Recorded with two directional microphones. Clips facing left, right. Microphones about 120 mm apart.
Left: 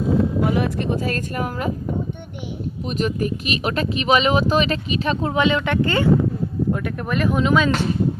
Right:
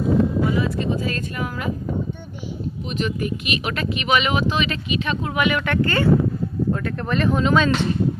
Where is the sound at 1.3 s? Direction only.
45° left (ahead or behind).